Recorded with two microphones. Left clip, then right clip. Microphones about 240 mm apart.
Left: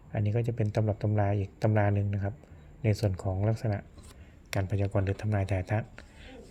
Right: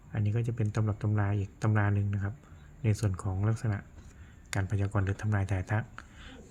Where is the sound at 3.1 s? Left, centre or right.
Right.